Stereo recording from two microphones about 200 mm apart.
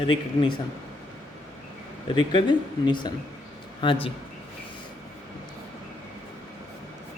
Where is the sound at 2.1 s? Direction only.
25° left (ahead or behind).